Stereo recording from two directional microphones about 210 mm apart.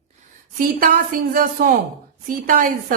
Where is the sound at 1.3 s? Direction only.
45° right (ahead or behind).